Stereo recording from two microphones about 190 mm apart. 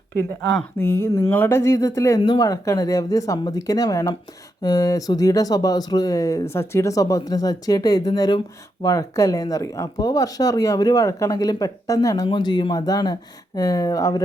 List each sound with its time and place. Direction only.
0.1 s speech: 10° left (ahead or behind)